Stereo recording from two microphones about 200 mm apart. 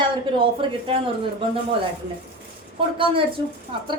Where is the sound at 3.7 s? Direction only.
25° right (ahead or behind).